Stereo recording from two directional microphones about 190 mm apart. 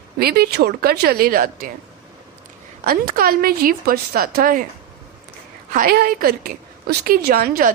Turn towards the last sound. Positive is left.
turn(degrees=-50)  # may be behind; listen again after turning